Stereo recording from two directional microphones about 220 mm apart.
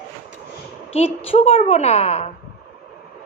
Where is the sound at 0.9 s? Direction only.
25° left (ahead or behind).